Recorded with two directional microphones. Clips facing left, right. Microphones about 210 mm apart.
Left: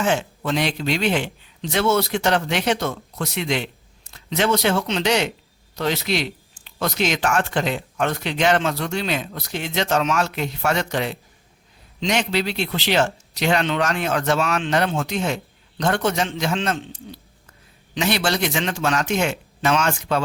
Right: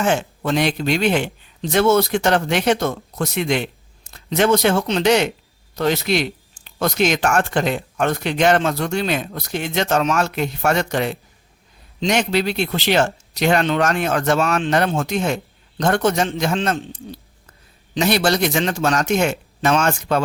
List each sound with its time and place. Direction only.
0.0 s speech: 50° right (ahead or behind)
17.9 s speech: 40° right (ahead or behind)